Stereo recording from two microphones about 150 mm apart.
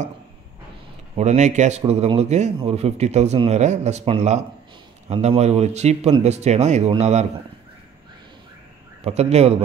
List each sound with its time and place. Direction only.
1.1 s speech: 50° right (ahead or behind)
9.0 s speech: 45° right (ahead or behind)